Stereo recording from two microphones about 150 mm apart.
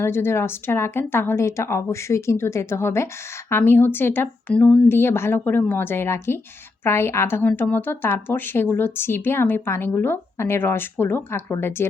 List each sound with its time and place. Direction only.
0.0 s speech: 15° left (ahead or behind)